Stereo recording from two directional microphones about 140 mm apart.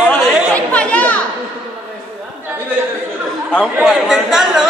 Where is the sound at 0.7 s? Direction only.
10° left (ahead or behind).